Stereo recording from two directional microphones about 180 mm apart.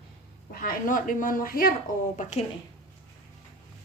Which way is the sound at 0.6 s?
50° left (ahead or behind).